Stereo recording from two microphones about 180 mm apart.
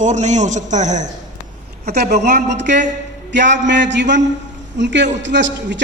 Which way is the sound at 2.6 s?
75° right (ahead or behind).